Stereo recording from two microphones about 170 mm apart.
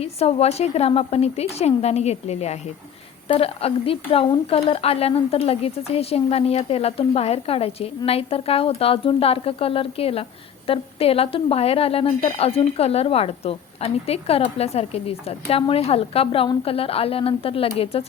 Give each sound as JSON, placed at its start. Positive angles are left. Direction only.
{"t": 0.0, "sound": "a woman's voice", "side_deg": 35}